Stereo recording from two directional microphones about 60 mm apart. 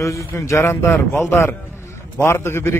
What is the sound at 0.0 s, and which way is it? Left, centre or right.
Speech, left.